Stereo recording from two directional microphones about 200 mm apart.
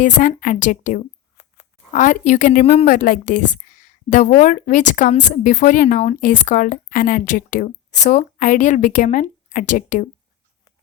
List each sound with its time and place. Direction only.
0.0 s a woman's voice: 40° left (ahead or behind)